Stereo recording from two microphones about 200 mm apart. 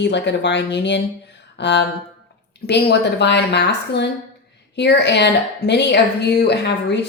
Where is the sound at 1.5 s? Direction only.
60° left (ahead or behind).